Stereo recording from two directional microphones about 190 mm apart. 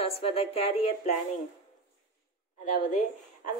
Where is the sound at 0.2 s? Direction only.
30° left (ahead or behind).